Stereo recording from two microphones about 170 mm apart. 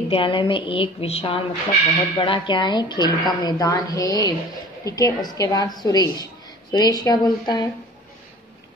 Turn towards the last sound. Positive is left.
turn(degrees=25)  # may be behind; listen again after turning